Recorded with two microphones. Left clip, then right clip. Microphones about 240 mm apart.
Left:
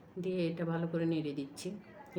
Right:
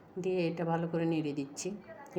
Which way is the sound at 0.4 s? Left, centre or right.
Centre.